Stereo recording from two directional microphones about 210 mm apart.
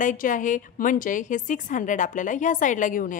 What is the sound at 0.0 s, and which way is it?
A woman's voice, 40° left (ahead or behind).